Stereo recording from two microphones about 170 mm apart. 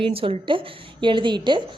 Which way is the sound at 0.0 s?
35° right (ahead or behind).